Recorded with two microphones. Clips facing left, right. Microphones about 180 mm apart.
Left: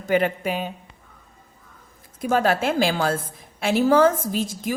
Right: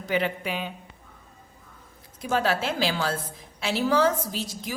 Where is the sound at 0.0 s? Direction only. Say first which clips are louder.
Left 6 dB; 50° left (ahead or behind).